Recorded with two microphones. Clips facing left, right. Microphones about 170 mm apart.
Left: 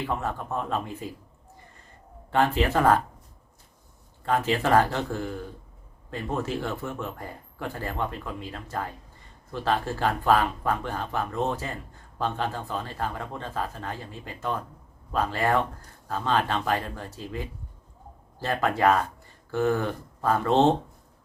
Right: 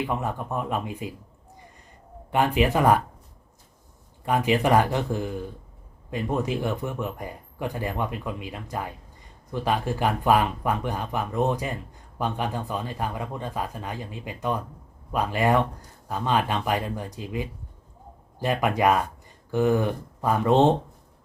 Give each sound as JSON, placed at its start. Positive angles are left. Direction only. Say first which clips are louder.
{"t": 0.0, "sound": "speech", "louder": "right 2 dB", "side_deg": -15}
{"t": 2.3, "sound": "speech", "louder": "right 1 dB", "side_deg": -15}
{"t": 4.3, "sound": "speech", "louder": "right 2 dB", "side_deg": -15}